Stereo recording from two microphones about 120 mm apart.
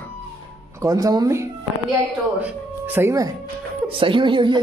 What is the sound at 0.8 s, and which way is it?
Speech, 30° right (ahead or behind).